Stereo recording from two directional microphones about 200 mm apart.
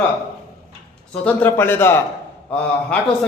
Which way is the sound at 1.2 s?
10° left (ahead or behind).